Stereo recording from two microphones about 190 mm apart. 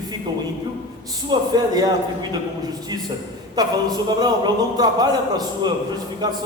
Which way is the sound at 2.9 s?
20° right (ahead or behind).